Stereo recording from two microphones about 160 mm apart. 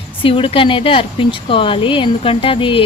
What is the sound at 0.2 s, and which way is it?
Speech, 35° left (ahead or behind).